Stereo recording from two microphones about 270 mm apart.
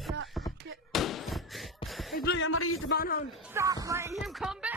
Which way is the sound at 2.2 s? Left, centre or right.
Left.